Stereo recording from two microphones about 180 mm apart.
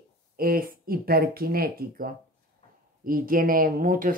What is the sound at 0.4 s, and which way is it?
Speech, 55° right (ahead or behind).